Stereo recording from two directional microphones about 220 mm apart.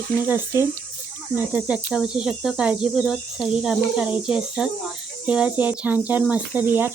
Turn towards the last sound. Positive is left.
turn(degrees=-10)  # may be behind; listen again after turning